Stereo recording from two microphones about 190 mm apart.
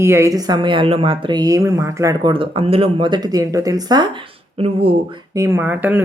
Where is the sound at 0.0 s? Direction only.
15° right (ahead or behind); by 4.9 s 30° right (ahead or behind).